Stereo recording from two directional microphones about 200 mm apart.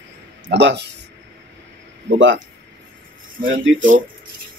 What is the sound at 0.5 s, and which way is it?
Speech, 60° right (ahead or behind).